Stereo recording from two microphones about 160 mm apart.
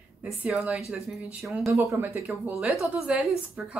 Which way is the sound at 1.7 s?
15° right (ahead or behind).